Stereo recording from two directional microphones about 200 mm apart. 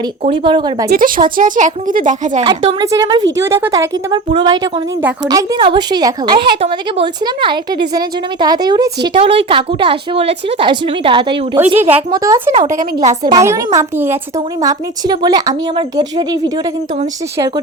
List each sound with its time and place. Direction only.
0.2 s a woman's voice: 25° right (ahead or behind)
0.9 s a woman's voice: 45° right (ahead or behind)
2.4 s a woman's voice: 25° right (ahead or behind)
11.8 s a woman's voice: 10° right (ahead or behind)
12.5 s a woman's voice: 40° right (ahead or behind)
13.0 s a woman's voice: 20° right (ahead or behind)